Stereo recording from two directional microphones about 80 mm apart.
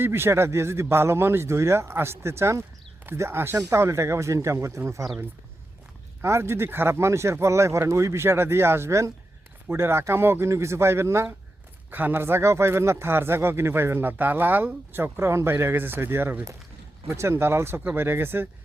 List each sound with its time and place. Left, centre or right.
0.0 s speech: right
6.2 s speech: right
11.9 s speech: right